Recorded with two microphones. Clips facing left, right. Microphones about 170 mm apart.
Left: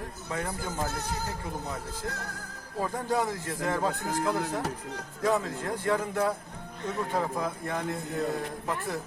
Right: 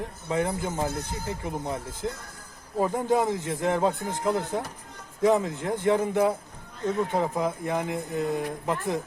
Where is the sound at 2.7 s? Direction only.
20° right (ahead or behind).